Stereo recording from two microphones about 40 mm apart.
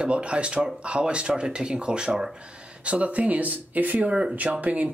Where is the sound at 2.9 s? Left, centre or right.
Right.